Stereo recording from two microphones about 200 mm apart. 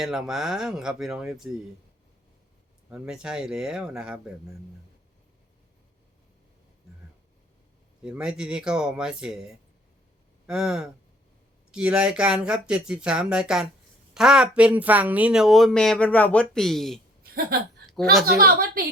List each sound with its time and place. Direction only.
0.0 s speech: centre (ahead or behind)
2.9 s speech: 5° right (ahead or behind)
8.0 s speech: 5° right (ahead or behind)
10.4 s speech: 5° right (ahead or behind)
18.3 s a woman's voice: 45° right (ahead or behind)